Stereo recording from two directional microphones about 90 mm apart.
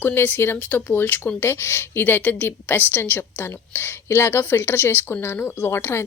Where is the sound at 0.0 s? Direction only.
20° left (ahead or behind).